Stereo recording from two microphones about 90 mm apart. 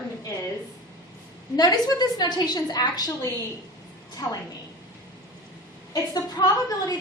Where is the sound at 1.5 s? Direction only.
50° left (ahead or behind).